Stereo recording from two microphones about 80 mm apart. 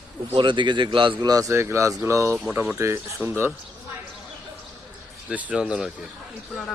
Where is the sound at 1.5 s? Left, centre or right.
Right.